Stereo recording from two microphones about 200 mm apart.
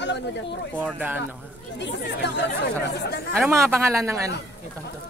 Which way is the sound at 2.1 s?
60° left (ahead or behind).